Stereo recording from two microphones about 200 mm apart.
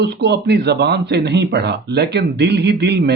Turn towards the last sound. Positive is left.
turn(degrees=-60)  # may be behind; listen again after turning